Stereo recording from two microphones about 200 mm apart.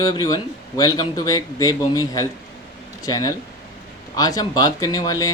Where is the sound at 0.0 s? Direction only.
20° left (ahead or behind).